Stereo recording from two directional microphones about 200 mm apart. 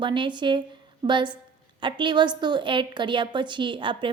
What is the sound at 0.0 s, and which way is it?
A woman's voice, 25° right (ahead or behind).